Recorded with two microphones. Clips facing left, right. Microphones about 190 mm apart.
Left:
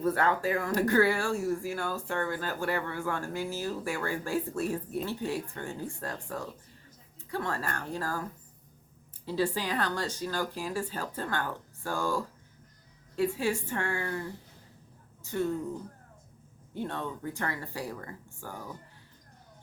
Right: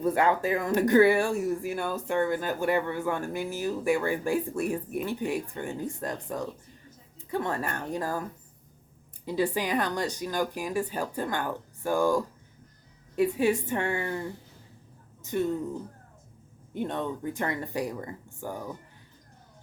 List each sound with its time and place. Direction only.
0.0 s speech: 15° right (ahead or behind)
9.2 s a woman's voice: 15° right (ahead or behind)
16.7 s speech: 20° right (ahead or behind)